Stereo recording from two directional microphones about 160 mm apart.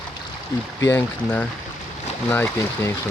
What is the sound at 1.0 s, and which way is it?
Speech, 10° left (ahead or behind).